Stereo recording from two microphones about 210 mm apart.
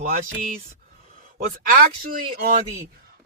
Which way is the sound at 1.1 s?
40° right (ahead or behind).